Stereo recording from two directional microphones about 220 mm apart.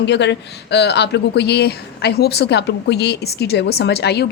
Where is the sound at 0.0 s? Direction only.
50° left (ahead or behind).